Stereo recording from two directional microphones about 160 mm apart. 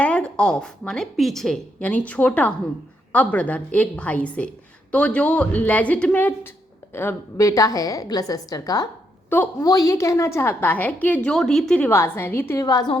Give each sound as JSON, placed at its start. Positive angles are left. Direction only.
{"t": 0.0, "sound": "a woman's voice", "side_deg": 5}
{"t": 9.3, "sound": "a woman's voice", "side_deg": 10}